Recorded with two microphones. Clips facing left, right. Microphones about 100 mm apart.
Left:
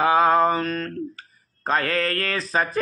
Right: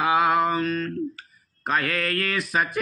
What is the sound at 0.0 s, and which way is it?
Mantra, 35° left (ahead or behind).